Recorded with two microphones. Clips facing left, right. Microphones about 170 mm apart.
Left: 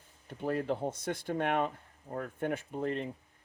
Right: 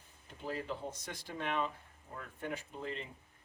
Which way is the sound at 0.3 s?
55° left (ahead or behind).